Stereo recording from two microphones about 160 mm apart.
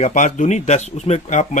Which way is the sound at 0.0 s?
50° left (ahead or behind).